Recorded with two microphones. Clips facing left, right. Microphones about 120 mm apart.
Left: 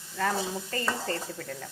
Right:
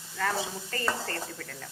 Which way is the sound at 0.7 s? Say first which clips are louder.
Even; 20° left (ahead or behind).